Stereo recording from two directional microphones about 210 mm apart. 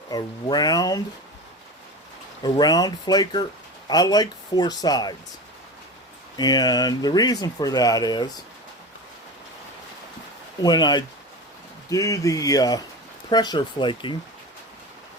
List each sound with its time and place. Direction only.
0.1 s speech: 20° left (ahead or behind)
2.4 s speech: 20° left (ahead or behind)
6.3 s speech: 20° left (ahead or behind)
10.6 s speech: 20° left (ahead or behind)